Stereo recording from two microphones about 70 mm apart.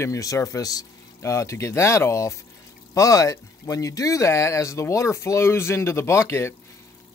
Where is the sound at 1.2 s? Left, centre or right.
Left.